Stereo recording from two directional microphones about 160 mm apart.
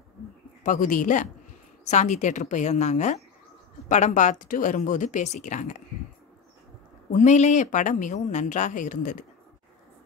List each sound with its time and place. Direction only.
0.7 s speech: 55° left (ahead or behind)
7.1 s speech: 50° left (ahead or behind)